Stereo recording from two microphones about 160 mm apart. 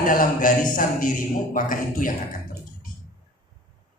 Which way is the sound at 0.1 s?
60° left (ahead or behind).